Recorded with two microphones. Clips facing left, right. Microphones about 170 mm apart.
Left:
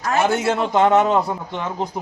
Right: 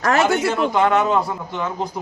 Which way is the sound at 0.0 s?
85° right.